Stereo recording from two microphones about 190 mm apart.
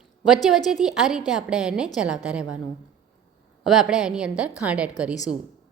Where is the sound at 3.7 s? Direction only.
Centre (ahead or behind).